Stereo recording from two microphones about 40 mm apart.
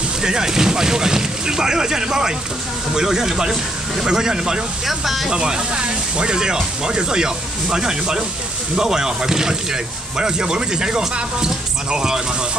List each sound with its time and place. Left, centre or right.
0.2 s speech: centre
4.8 s speech: centre
5.3 s speech: right